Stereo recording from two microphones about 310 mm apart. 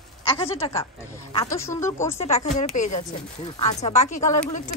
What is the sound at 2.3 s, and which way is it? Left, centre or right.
Speech, left.